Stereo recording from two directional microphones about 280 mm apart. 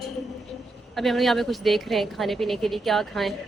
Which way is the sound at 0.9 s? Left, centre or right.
Centre.